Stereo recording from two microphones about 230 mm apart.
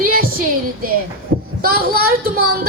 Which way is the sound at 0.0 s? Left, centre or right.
Right.